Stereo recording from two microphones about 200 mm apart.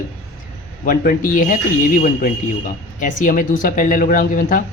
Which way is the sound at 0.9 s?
45° left (ahead or behind).